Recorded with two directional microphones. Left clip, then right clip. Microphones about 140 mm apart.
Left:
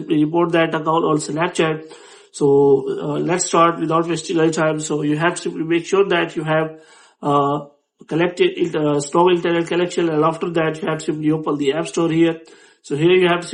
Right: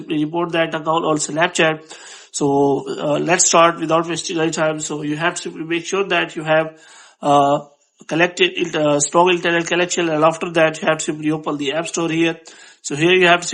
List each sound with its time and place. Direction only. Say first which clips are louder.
0.1 s speech: left 3 dB; 10° right (ahead or behind); by 4.1 s 30° right (ahead or behind)
4.1 s speech: left 2 dB; 15° right (ahead or behind); by 13.5 s 35° right (ahead or behind)